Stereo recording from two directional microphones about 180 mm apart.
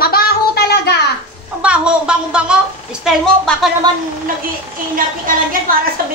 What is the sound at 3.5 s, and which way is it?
Speech, 5° left (ahead or behind).